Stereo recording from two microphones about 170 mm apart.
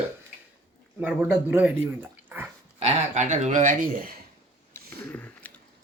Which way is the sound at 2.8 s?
40° right (ahead or behind).